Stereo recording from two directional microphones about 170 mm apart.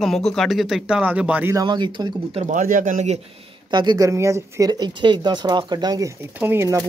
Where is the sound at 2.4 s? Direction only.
50° right (ahead or behind).